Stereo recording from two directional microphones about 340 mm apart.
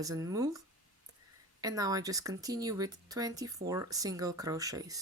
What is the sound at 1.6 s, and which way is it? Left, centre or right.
Speech, centre.